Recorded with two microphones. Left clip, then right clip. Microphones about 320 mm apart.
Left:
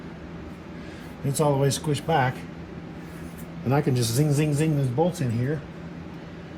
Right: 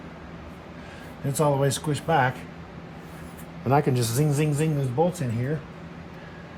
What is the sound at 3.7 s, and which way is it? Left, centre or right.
Speech, right.